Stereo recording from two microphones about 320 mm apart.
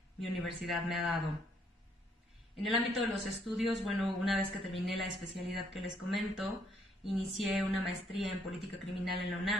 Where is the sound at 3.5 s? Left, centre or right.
Centre.